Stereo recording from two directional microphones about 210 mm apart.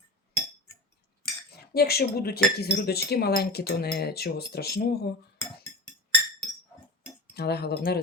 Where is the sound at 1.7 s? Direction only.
50° left (ahead or behind).